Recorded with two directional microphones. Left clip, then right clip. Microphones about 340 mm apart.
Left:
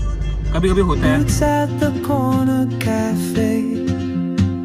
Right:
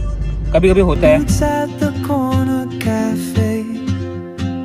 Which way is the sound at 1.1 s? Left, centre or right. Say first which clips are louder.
Right 2 dB; centre.